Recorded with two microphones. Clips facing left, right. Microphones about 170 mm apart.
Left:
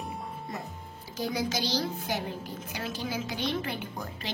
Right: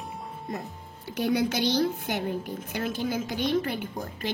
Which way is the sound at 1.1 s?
65° right (ahead or behind).